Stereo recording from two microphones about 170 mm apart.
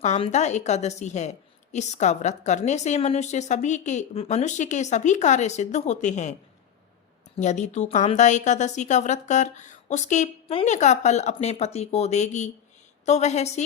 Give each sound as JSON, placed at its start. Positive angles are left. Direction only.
{"t": 0.0, "sound": "a woman's voice", "side_deg": 40}
{"t": 7.3, "sound": "a woman's voice", "side_deg": 45}